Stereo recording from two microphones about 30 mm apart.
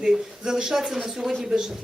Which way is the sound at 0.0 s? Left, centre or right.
Right.